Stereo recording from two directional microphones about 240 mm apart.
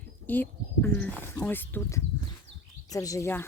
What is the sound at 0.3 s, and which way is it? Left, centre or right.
Speech, centre.